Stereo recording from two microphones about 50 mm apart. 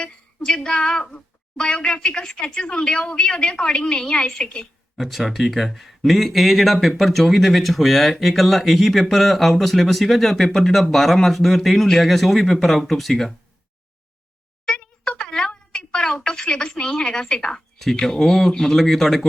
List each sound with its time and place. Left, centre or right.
0.0 s a woman's voice: centre
4.9 s speech: centre
14.6 s a sound: centre
15.3 s a woman's voice: centre